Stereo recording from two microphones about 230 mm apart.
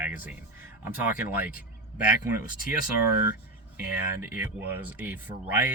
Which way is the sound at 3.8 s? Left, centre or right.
Centre.